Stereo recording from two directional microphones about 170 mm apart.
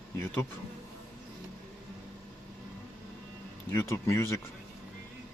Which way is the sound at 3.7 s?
15° left (ahead or behind).